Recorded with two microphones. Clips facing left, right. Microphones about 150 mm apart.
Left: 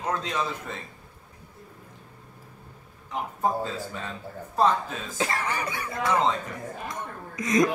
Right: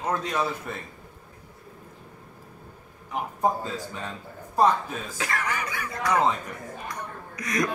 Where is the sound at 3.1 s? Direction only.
15° right (ahead or behind).